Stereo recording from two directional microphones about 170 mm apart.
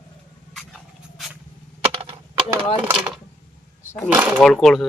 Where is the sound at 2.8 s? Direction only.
5° right (ahead or behind).